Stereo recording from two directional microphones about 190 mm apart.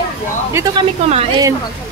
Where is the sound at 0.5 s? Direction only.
20° right (ahead or behind).